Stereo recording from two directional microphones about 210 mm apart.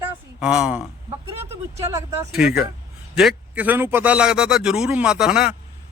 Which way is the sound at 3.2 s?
5° right (ahead or behind).